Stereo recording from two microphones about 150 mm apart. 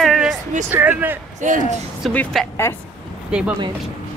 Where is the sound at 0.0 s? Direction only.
Centre (ahead or behind).